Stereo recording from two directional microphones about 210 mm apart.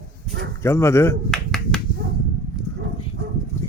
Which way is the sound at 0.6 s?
10° left (ahead or behind).